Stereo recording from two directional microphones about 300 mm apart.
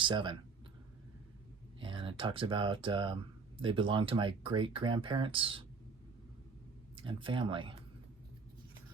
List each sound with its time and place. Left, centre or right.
0.0 s speech: centre
1.8 s speech: centre
6.9 s speech: centre